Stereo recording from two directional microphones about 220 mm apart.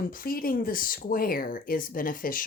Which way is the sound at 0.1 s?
40° left (ahead or behind).